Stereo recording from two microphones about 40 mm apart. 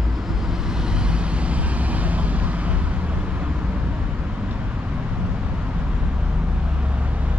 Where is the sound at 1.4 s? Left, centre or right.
Right.